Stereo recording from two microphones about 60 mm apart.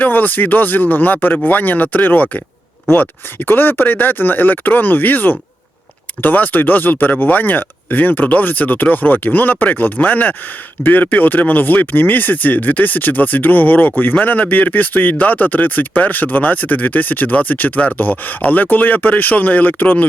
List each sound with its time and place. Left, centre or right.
0.0 s speech: left